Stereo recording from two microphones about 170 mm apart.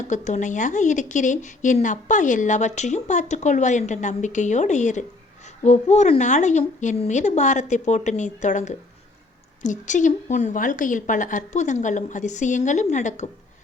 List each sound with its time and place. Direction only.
0.1 s a woman's voice: 45° left (ahead or behind)